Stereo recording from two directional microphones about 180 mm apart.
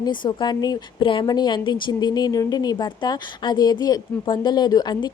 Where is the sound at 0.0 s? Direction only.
25° left (ahead or behind).